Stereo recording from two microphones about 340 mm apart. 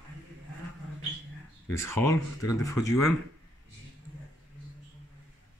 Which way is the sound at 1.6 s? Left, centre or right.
Centre.